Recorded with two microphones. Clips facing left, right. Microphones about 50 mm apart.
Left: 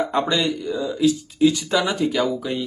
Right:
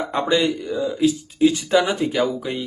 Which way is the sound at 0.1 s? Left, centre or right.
Centre.